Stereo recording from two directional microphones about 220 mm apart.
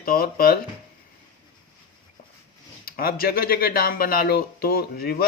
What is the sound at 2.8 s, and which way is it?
Speech, 40° left (ahead or behind).